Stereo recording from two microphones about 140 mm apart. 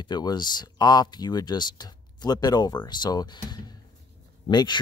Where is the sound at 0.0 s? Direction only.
30° left (ahead or behind).